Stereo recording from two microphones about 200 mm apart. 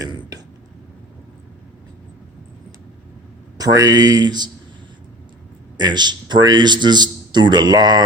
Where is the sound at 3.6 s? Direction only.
20° right (ahead or behind).